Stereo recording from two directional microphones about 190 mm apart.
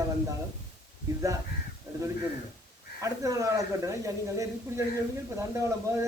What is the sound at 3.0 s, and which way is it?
Speech, 15° right (ahead or behind).